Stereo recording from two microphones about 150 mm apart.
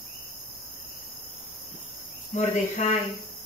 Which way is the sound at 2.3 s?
55° left (ahead or behind).